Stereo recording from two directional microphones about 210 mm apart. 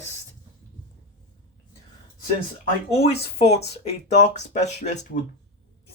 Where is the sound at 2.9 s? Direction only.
30° left (ahead or behind).